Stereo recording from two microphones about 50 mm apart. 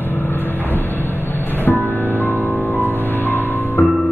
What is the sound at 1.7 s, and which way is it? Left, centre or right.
Music, left.